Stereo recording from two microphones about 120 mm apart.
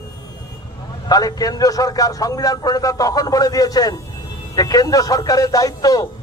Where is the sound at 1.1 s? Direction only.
35° left (ahead or behind).